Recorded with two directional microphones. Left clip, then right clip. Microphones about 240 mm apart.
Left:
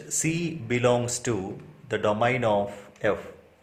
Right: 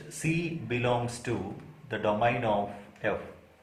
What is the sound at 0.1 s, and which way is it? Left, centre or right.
Speech, left.